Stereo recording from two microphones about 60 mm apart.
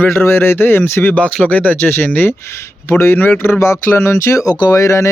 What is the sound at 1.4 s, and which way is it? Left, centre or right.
Speech, left.